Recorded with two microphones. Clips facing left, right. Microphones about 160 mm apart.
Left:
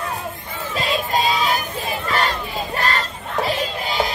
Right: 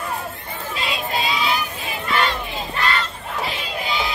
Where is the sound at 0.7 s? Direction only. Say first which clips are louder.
Left 5 dB; 40° left (ahead or behind).